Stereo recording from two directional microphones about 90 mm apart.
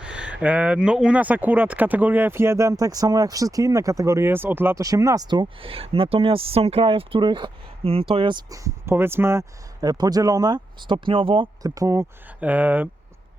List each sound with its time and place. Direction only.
0.0 s speech: 10° right (ahead or behind)
4.8 s speech: 40° right (ahead or behind)
5.3 s speech: 75° right (ahead or behind)
8.4 s speech: 35° right (ahead or behind)
9.8 s speech: 45° right (ahead or behind); by 11.4 s 80° right
11.6 s speech: 40° right (ahead or behind)
12.4 s speech: 15° right (ahead or behind)